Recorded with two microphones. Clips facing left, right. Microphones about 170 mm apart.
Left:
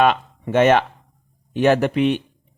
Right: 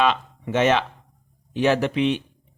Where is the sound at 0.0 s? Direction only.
50° left (ahead or behind).